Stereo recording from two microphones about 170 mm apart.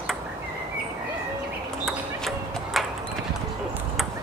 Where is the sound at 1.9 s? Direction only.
Centre (ahead or behind).